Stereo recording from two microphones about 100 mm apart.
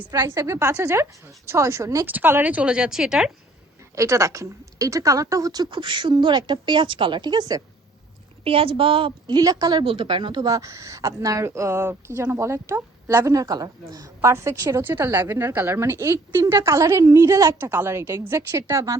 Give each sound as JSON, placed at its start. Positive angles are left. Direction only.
{"t": 0.3, "sound": "a woman's voice", "side_deg": -30}
{"t": 2.0, "sound": "speech", "side_deg": -20}
{"t": 3.9, "sound": "a woman's voice", "side_deg": -30}
{"t": 8.4, "sound": "a woman's voice", "side_deg": -70}
{"t": 9.8, "sound": "a woman's voice", "side_deg": -60}
{"t": 17.7, "sound": "a woman's voice", "side_deg": -25}